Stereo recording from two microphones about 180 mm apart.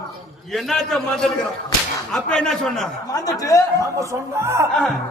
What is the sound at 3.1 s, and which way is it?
Speech, 20° left (ahead or behind).